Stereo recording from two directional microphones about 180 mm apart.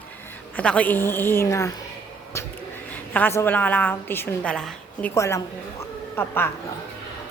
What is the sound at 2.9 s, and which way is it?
A woman's voice, 10° left (ahead or behind).